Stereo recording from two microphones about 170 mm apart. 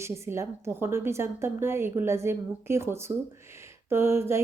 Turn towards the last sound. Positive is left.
turn(degrees=-15)  # may be behind; listen again after turning